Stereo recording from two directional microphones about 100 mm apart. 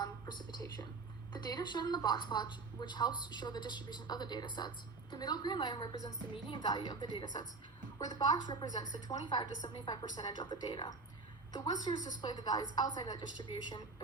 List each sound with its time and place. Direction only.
0.0 s a sound: 45° left (ahead or behind)
1.3 s a woman's voice: 45° left (ahead or behind)
6.3 s a woman's voice: 50° left (ahead or behind)